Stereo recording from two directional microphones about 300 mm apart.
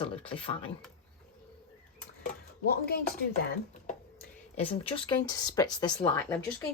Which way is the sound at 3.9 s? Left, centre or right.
Left.